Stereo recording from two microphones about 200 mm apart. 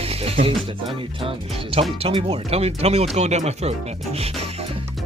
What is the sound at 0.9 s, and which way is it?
Speech, 30° right (ahead or behind).